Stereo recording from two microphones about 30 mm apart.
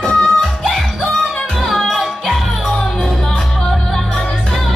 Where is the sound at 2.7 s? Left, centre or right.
Centre.